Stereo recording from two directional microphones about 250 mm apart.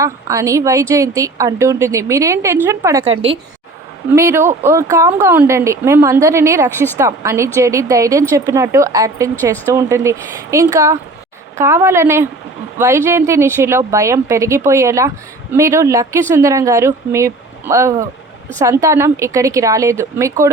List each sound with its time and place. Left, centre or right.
0.0 s a woman's voice: centre
3.0 s a woman's voice: right
4.1 s a woman's voice: centre